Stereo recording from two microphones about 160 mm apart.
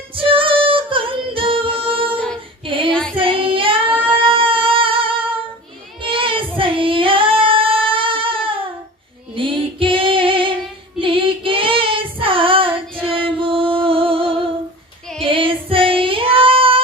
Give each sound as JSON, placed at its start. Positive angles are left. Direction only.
{"t": 0.2, "sound": "music", "side_deg": -35}
{"t": 2.1, "sound": "female singing", "side_deg": 5}
{"t": 2.9, "sound": "child singing", "side_deg": 5}
{"t": 3.2, "sound": "child singing", "side_deg": -35}
{"t": 4.0, "sound": "music", "side_deg": -35}
{"t": 6.0, "sound": "child singing", "side_deg": -35}
{"t": 9.3, "sound": "female singing", "side_deg": -35}
{"t": 11.0, "sound": "child singing", "side_deg": -35}
{"t": 15.3, "sound": "female singing", "side_deg": -35}